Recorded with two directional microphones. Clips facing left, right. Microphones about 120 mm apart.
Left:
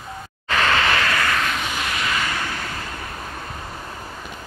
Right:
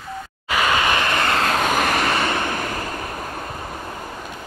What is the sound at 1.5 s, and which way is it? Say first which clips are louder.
Vehicle: right 7 dB; 50° right (ahead or behind).